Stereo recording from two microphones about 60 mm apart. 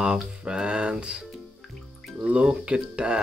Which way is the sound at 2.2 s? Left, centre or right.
Centre.